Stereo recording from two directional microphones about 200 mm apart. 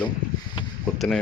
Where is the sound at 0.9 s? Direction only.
Centre (ahead or behind).